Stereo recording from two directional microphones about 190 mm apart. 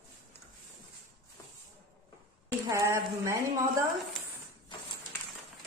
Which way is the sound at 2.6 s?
15° right (ahead or behind).